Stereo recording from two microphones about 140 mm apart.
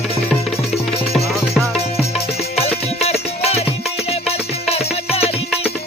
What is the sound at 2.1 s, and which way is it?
Music, 45° left (ahead or behind).